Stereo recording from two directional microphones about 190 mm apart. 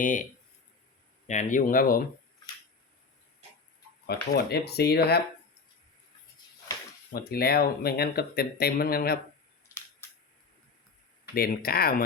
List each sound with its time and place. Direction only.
0.0 s speech: 45° left (ahead or behind)
1.3 s speech: 40° left (ahead or behind)
4.0 s speech: 55° left (ahead or behind)
7.1 s speech: 55° left (ahead or behind)
11.3 s speech: 50° left (ahead or behind)